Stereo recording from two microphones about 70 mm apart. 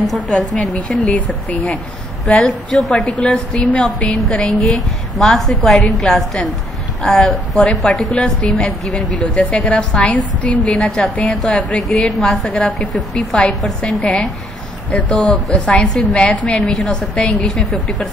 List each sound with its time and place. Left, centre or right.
0.1 s a woman's voice: centre
0.7 s speech: centre
2.2 s a woman's voice: centre
3.1 s a woman's voice: centre
10.6 s a woman's voice: centre
13.7 s a woman's voice: centre
15.5 s a woman's voice: centre